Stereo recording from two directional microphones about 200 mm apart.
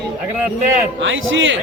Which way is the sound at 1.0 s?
70° right (ahead or behind).